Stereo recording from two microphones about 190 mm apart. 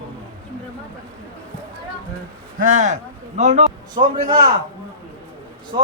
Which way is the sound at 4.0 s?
25° right (ahead or behind).